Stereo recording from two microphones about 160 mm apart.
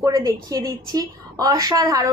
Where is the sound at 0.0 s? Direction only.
25° right (ahead or behind).